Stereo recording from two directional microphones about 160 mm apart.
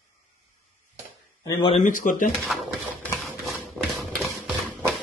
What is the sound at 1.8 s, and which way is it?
Speech, 55° left (ahead or behind).